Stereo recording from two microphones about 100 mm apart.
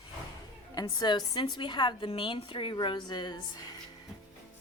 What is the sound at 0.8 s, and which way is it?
A woman's voice, 50° left (ahead or behind).